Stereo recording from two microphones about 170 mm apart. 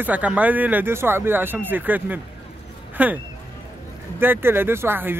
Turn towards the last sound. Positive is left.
turn(degrees=-15)  # may be behind; listen again after turning